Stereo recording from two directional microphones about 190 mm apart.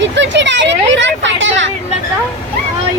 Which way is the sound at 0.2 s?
70° right (ahead or behind).